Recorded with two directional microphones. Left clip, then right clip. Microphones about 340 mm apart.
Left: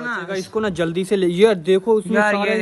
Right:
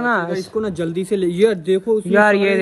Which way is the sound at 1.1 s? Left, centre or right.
Centre.